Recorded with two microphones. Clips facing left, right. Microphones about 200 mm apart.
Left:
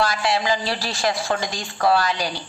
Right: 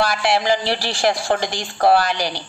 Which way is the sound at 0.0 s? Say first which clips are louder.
Right 3 dB; 65° right (ahead or behind).